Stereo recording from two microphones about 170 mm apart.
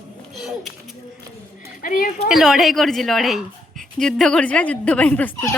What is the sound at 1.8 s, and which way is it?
Speech, 55° left (ahead or behind).